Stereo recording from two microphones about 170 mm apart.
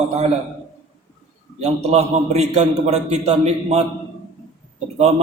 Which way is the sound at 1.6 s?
40° right (ahead or behind).